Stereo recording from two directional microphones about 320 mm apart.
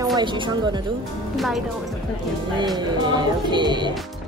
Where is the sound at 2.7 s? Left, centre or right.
Centre.